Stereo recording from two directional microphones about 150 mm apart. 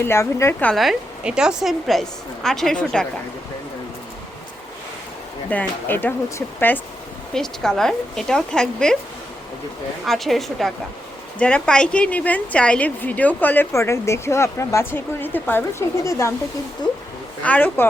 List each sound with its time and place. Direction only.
0.0 s a woman's voice: 15° left (ahead or behind)
0.7 s a woman's voice: centre (ahead or behind)
5.5 s a woman's voice: 10° left (ahead or behind)
10.1 s a woman's voice: centre (ahead or behind); by 16.3 s 20° left (ahead or behind)
16.8 s speech: 30° left (ahead or behind)
17.4 s a woman's voice: 10° left (ahead or behind)